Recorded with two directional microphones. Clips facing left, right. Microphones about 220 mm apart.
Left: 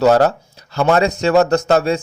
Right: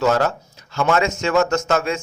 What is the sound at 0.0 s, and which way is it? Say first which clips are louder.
A man's voice: left 6 dB; 35° left (ahead or behind).